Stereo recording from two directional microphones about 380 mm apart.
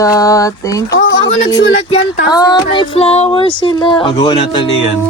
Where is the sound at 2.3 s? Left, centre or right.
Centre.